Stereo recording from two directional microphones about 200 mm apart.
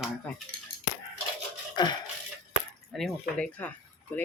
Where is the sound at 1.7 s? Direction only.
20° left (ahead or behind).